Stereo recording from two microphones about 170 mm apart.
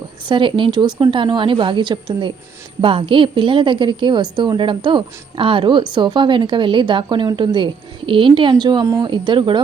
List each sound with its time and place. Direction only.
0.3 s a woman's voice: 30° right (ahead or behind)